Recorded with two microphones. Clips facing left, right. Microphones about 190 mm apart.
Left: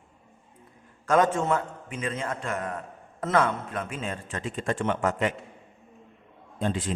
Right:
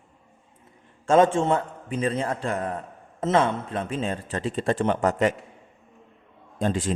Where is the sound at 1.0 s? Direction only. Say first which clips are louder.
Right 4 dB; 25° right (ahead or behind).